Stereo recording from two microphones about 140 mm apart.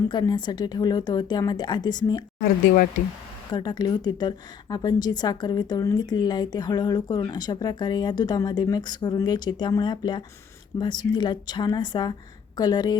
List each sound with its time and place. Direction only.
0.1 s a woman's voice: 30° left (ahead or behind)
3.5 s a woman's voice: 30° left (ahead or behind)